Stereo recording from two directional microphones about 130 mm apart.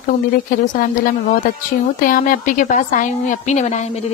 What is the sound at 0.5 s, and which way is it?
A woman's voice, 90° left.